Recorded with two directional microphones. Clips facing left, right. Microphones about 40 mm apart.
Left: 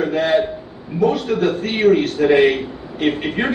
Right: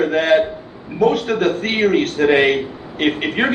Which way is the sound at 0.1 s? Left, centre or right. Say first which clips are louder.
Right 2 dB; right.